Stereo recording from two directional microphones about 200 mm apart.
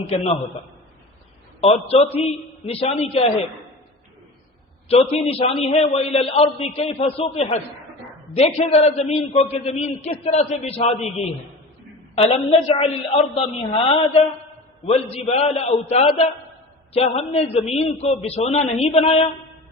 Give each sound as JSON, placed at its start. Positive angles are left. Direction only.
{"t": 1.6, "sound": "a man's voice", "side_deg": 30}
{"t": 4.9, "sound": "a man's voice", "side_deg": 30}